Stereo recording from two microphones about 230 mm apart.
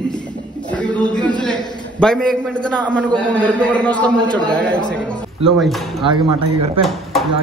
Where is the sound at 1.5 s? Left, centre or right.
Centre.